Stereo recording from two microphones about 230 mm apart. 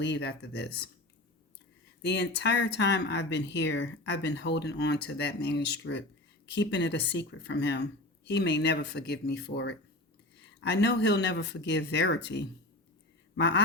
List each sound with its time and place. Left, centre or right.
0.0 s speech: left
2.0 s speech: left